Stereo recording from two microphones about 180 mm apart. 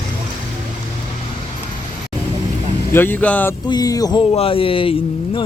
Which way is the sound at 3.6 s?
20° left (ahead or behind).